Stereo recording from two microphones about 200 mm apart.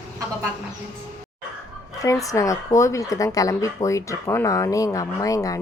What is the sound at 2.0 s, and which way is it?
Speech, 15° left (ahead or behind).